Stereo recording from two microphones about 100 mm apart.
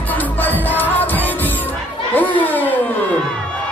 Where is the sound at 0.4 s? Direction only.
20° left (ahead or behind).